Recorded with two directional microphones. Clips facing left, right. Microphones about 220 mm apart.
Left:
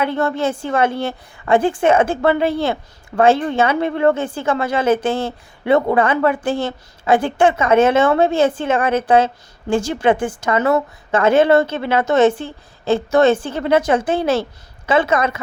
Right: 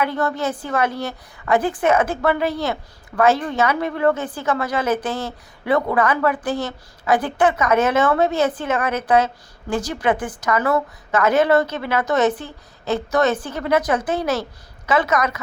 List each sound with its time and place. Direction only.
0.0 s a woman's voice: 25° left (ahead or behind)